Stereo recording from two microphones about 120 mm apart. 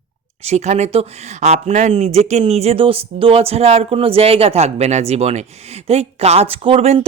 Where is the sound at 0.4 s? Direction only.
65° right (ahead or behind).